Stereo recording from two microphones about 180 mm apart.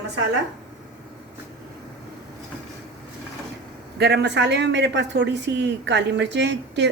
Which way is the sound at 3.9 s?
65° right (ahead or behind).